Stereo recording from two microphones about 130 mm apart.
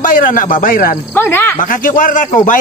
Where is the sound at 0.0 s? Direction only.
90° left.